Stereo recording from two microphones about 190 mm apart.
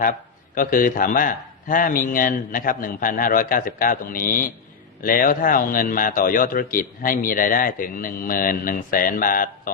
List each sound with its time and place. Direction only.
0.5 s a man's voice: 45° left (ahead or behind)